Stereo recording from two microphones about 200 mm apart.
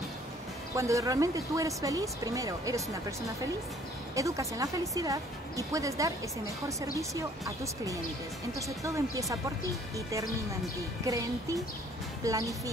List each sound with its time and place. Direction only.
0.7 s speech: 15° right (ahead or behind)
4.1 s speech: 15° right (ahead or behind)